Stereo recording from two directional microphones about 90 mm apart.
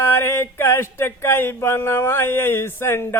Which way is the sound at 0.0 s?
25° left (ahead or behind).